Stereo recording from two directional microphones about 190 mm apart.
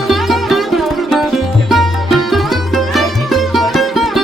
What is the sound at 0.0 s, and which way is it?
Music, centre (ahead or behind).